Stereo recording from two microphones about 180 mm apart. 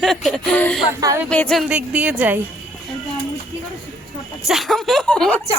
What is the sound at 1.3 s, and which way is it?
Speech, 5° left (ahead or behind).